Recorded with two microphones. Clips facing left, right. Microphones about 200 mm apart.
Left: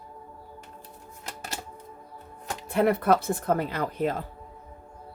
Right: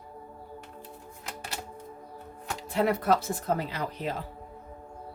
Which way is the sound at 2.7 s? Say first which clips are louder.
Left 3 dB; 55° left (ahead or behind).